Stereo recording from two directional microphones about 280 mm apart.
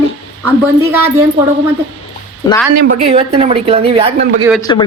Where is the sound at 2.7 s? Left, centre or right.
Right.